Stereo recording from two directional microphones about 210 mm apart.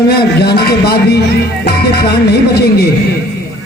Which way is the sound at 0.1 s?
50° left (ahead or behind).